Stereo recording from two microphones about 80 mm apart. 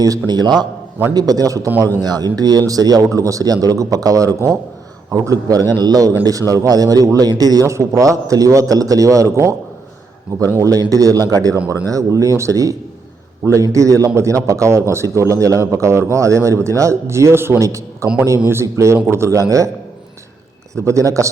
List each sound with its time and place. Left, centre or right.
0.0 s a man's voice: right
1.1 s a man's voice: right
10.6 s a man's voice: right
20.7 s a man's voice: right